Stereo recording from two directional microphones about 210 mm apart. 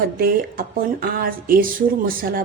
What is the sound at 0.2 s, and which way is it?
Speech, 45° right (ahead or behind).